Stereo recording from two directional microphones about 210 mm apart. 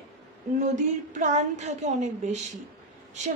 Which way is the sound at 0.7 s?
35° right (ahead or behind).